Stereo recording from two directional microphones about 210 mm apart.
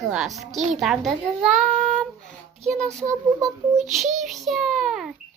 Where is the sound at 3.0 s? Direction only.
15° right (ahead or behind).